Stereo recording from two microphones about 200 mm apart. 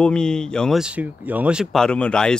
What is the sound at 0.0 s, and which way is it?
Speech, 5° left (ahead or behind).